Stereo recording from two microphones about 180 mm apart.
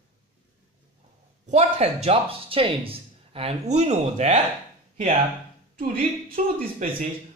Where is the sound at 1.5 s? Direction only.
35° right (ahead or behind).